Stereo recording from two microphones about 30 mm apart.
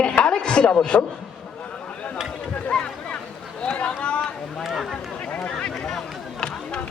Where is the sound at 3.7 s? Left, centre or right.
Left.